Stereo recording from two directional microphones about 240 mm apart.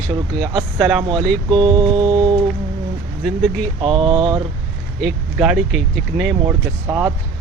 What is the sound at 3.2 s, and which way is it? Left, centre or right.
Speech, centre.